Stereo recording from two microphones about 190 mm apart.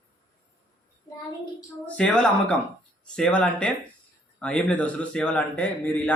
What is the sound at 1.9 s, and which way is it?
A man's voice, 5° left (ahead or behind).